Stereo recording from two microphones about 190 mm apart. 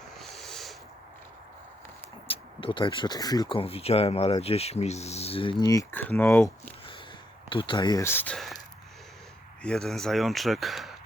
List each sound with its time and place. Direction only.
0.2 s a sound: centre (ahead or behind)
2.2 s speech: 30° left (ahead or behind); by 6.7 s 10° left (ahead or behind)
7.5 s speech: 25° left (ahead or behind); by 8.5 s 5° left (ahead or behind)
9.6 s speech: centre (ahead or behind)